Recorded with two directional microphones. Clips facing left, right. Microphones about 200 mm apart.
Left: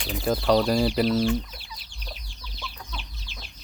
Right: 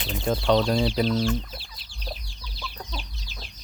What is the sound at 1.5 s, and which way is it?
Chicken, 30° right (ahead or behind).